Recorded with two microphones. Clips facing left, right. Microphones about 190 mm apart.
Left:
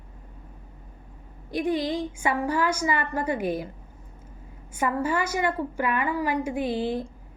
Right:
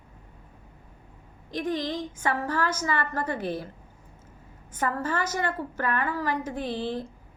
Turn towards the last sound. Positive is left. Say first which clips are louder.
# left 4 dB
turn(degrees=10)  # may be behind; listen again after turning